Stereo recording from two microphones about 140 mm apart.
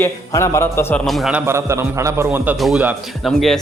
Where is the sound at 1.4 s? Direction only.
20° right (ahead or behind).